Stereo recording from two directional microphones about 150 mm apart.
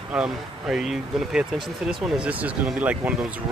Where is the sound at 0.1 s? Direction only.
5° right (ahead or behind).